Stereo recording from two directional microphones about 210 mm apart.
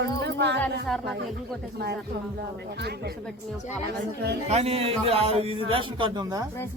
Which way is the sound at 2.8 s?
50° right (ahead or behind).